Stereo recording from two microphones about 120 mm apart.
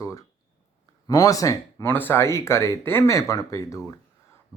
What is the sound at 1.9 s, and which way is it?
Speech, 15° left (ahead or behind).